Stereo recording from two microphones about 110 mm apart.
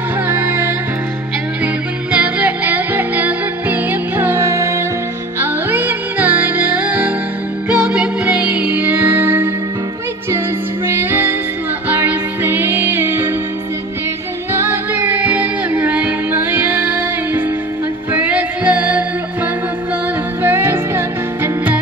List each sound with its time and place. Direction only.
0.3 s music: 20° right (ahead or behind)
2.1 s music: 15° right (ahead or behind)
10.9 s music: 20° right (ahead or behind)
14.5 s music: 20° right (ahead or behind)
20.4 s music: 20° right (ahead or behind)